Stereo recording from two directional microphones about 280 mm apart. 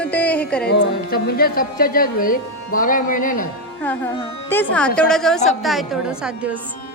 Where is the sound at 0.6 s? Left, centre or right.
Left.